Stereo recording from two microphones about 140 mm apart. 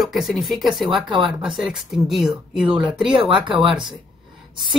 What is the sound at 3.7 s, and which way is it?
Speech, 5° right (ahead or behind).